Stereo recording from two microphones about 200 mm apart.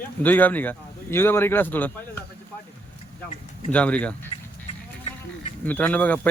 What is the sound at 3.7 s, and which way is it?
Speech, 5° left (ahead or behind).